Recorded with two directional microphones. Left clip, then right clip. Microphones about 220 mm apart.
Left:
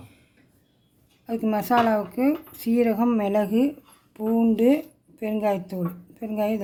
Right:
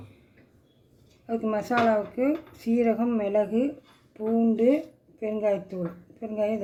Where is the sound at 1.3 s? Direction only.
45° left (ahead or behind).